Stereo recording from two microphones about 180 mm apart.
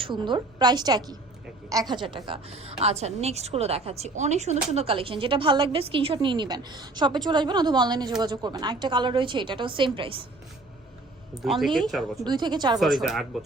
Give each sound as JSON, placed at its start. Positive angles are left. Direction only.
{"t": 0.0, "sound": "a woman's voice", "side_deg": -25}
{"t": 11.4, "sound": "speech", "side_deg": 0}
{"t": 12.2, "sound": "a woman's voice", "side_deg": -25}
{"t": 12.8, "sound": "speech", "side_deg": 0}